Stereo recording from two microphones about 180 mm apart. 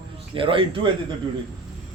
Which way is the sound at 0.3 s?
30° right (ahead or behind).